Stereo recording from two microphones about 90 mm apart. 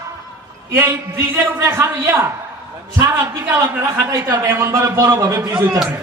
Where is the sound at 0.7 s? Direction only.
35° right (ahead or behind).